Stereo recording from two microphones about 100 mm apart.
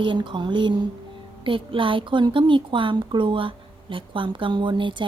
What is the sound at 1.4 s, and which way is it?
Speech, 60° right (ahead or behind).